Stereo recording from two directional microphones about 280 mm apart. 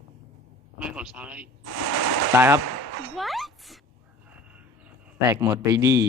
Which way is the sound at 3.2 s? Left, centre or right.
Centre.